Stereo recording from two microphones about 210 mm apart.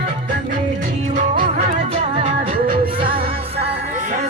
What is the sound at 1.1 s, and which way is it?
Music, 35° right (ahead or behind).